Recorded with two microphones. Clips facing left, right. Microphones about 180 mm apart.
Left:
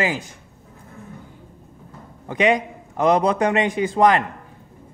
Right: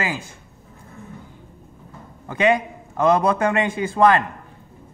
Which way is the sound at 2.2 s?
15° left (ahead or behind).